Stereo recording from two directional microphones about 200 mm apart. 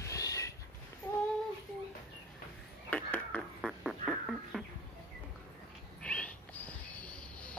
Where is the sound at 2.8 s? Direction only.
10° left (ahead or behind).